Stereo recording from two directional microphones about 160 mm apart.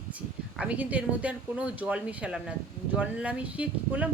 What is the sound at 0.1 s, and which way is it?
A woman's voice, 5° right (ahead or behind).